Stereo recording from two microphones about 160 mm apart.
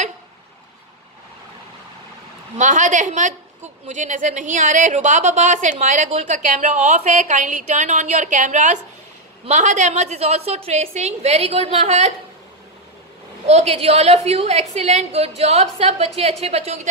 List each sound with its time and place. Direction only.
2.5 s a woman's voice: 50° right (ahead or behind)
13.5 s a woman's voice: 40° right (ahead or behind)